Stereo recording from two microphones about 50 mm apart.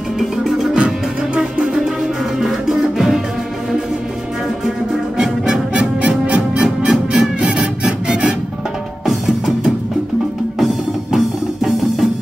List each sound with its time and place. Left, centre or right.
0.2 s music: centre
0.7 s music: centre
1.4 s music: centre
5.1 s music: centre
5.7 s music: right
9.0 s music: centre
11.1 s music: centre